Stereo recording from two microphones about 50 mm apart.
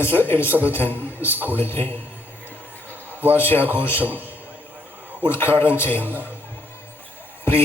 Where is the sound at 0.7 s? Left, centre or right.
Left.